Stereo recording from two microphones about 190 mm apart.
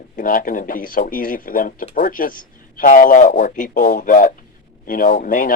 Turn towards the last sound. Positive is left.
turn(degrees=45)  # may be behind; listen again after turning